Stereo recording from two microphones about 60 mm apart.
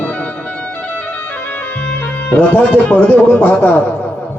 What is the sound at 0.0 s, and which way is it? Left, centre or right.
Music, left.